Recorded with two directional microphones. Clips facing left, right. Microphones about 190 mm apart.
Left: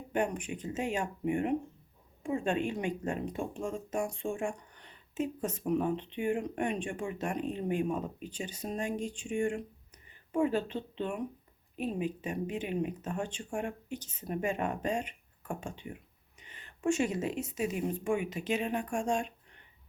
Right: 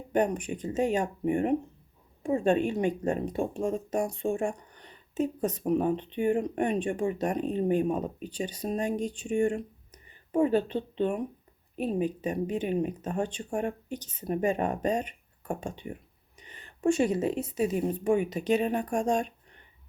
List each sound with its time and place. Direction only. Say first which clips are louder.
0.1 s speech: right 5 dB; 40° right (ahead or behind)